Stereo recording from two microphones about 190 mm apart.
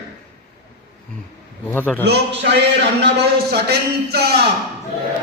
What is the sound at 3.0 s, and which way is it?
A man's voice, 60° right (ahead or behind).